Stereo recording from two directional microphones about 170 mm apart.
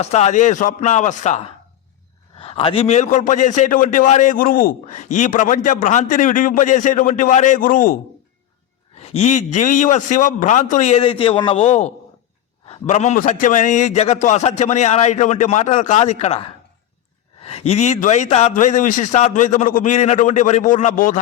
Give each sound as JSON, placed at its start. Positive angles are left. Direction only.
{"t": 0.0, "sound": "a man's voice", "side_deg": 40}
{"t": 2.4, "sound": "a man's voice", "side_deg": 35}
{"t": 9.0, "sound": "a man's voice", "side_deg": 40}